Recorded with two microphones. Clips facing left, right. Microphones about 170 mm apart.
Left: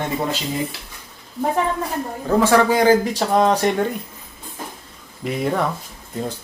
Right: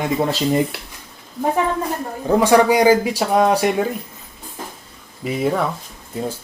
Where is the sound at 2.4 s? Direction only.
15° right (ahead or behind).